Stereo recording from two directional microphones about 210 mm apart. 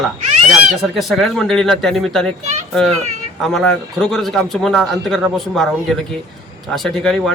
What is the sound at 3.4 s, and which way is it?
A man's voice, 5° left (ahead or behind).